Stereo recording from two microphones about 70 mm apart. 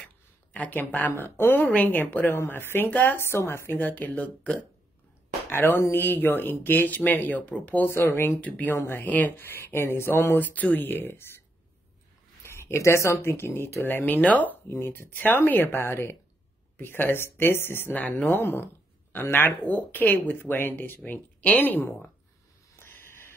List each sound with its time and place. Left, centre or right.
0.5 s speech: left
3.2 s speech: left
3.8 s speech: left
5.5 s speech: left
7.9 s speech: left
8.4 s speech: left
8.7 s speech: left
12.5 s speech: left
14.7 s speech: left
17.9 s speech: left
22.8 s a sound: left